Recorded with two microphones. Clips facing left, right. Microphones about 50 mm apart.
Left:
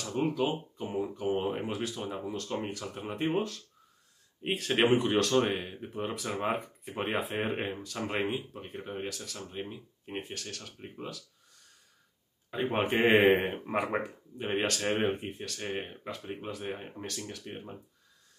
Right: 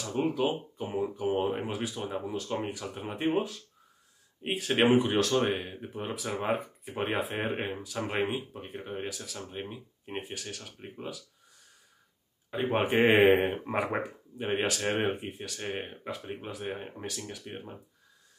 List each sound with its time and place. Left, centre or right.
0.0 s speech: centre
12.4 s speech: centre